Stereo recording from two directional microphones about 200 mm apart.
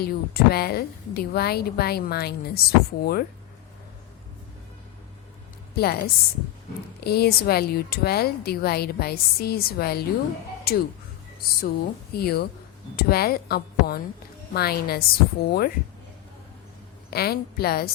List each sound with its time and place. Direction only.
0.0 s a woman's voice: 50° left (ahead or behind)
5.7 s a woman's voice: 50° left (ahead or behind)
17.1 s a woman's voice: 50° left (ahead or behind)